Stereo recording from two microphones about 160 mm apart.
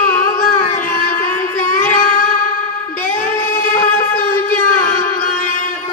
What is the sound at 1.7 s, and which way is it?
Child singing, 55° left (ahead or behind).